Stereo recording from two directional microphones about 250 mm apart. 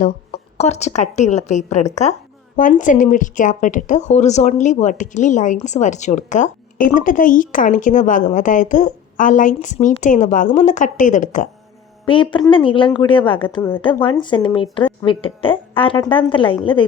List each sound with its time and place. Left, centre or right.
0.5 s a woman's voice: left
12.0 s a woman's voice: centre
13.6 s speech: centre
13.8 s a woman's voice: centre